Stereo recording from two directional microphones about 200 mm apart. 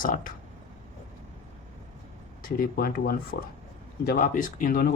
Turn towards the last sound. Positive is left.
turn(degrees=50)  # may be behind; listen again after turning